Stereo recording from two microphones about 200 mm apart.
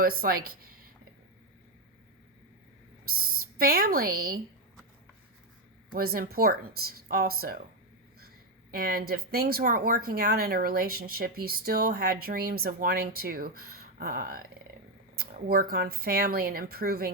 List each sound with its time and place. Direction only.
0.0 s a woman's voice: 45° right (ahead or behind)
3.1 s speech: 45° right (ahead or behind)
5.9 s speech: 50° right (ahead or behind)
8.7 s speech: 50° right (ahead or behind)